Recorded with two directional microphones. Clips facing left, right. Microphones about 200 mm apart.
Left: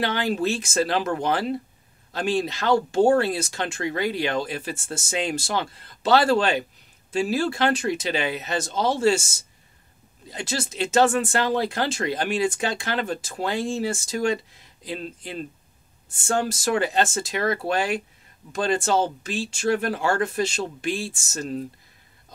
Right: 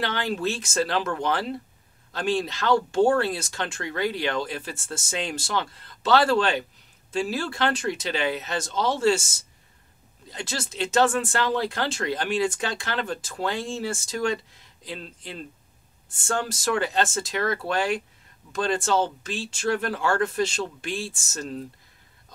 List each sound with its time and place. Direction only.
0.0 s speech: 10° left (ahead or behind)
10.3 s speech: 10° left (ahead or behind)